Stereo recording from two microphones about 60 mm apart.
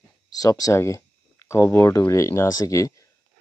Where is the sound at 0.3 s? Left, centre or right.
Left.